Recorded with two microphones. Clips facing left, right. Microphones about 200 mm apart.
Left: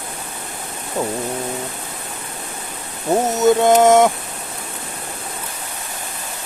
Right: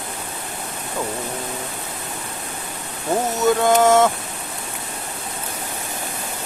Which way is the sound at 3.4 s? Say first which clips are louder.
Left 3 dB; 20° left (ahead or behind).